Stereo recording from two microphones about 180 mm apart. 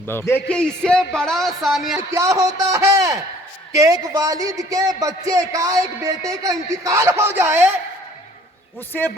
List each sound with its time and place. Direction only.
0.1 s a man's voice: 15° left (ahead or behind)
2.0 s a man's voice: 15° right (ahead or behind)
8.9 s a man's voice: 10° left (ahead or behind)